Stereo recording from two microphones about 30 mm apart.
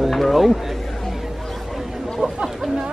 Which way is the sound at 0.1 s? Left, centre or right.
Centre.